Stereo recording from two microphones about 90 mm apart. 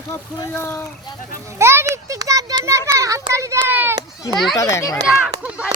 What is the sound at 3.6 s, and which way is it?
Children playing, 25° right (ahead or behind).